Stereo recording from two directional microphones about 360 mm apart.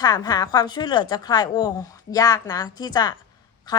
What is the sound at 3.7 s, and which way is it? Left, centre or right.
Quack, centre.